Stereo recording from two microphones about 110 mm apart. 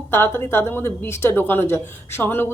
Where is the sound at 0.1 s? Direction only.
20° left (ahead or behind).